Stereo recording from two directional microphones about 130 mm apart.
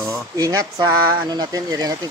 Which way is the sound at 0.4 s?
25° right (ahead or behind).